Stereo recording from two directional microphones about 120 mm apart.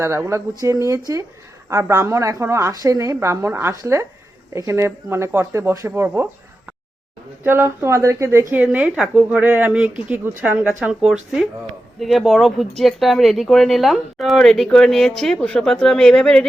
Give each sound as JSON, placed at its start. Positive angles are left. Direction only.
{"t": 0.0, "sound": "a woman's voice", "side_deg": -20}
{"t": 7.4, "sound": "a woman's voice", "side_deg": -20}